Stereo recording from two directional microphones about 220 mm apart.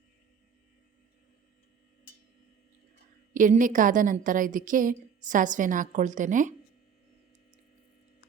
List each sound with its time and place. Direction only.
3.3 s a woman's voice: 35° right (ahead or behind)